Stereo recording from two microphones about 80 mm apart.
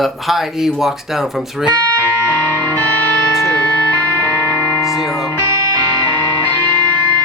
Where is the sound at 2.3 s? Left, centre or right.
Left.